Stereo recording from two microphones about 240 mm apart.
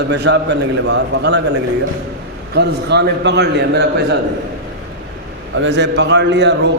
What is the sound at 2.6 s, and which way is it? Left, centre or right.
A man's voice, right.